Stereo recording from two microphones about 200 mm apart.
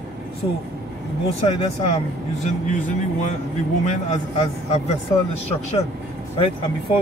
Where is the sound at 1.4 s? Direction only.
30° left (ahead or behind).